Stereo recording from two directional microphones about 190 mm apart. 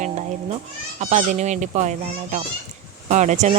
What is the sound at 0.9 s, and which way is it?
Speech, 40° right (ahead or behind).